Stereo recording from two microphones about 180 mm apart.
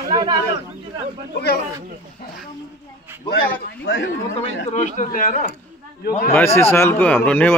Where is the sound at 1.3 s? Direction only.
65° left (ahead or behind).